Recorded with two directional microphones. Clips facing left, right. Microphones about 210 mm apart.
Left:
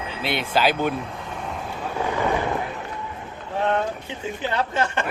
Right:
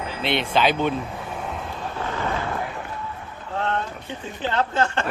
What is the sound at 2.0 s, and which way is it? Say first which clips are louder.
Vehicle: left 4 dB; 15° left (ahead or behind).